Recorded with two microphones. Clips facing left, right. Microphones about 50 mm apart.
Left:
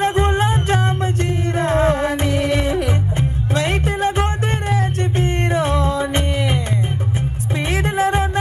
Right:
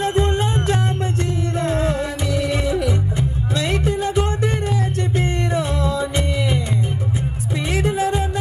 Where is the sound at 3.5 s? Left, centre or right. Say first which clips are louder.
Left 1 dB; left.